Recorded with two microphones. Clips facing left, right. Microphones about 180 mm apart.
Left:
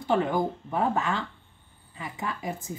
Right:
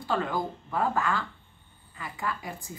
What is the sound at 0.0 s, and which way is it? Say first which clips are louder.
A woman's voice: left 4 dB; 20° left (ahead or behind).